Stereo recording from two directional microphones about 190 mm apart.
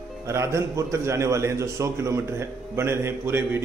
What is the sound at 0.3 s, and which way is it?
A man's voice, 15° right (ahead or behind).